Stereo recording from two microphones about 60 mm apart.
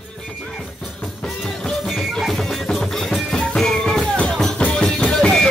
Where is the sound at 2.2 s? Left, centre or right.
Centre.